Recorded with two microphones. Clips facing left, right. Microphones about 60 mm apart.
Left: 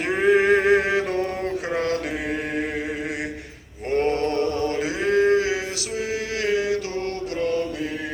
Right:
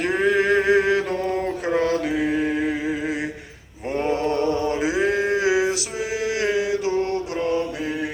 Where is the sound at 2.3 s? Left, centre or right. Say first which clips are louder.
Right 4 dB; centre.